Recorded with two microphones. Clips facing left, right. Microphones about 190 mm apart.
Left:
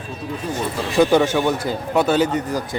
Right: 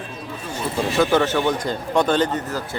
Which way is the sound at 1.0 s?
15° left (ahead or behind).